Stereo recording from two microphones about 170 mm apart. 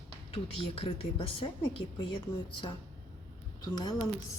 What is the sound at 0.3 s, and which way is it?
A woman's voice, 35° left (ahead or behind).